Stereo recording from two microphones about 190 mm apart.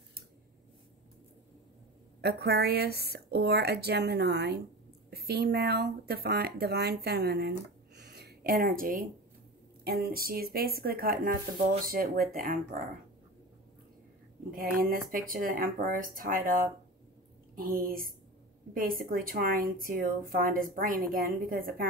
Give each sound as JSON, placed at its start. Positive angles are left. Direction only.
{"t": 2.2, "sound": "a woman's voice", "side_deg": -60}
{"t": 14.5, "sound": "a woman's voice", "side_deg": -50}